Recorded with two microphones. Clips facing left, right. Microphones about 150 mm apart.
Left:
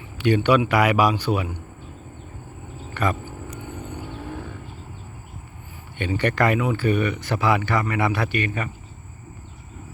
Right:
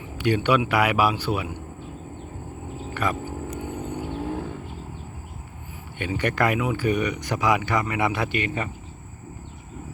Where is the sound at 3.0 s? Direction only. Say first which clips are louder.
Left 2 dB; 5° right (ahead or behind).